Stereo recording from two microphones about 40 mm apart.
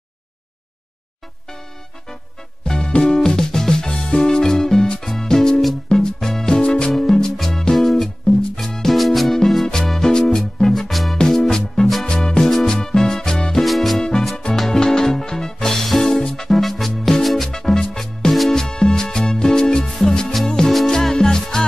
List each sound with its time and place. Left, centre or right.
3.0 s music: centre
13.7 s music: centre
14.3 s music: centre
17.5 s music: centre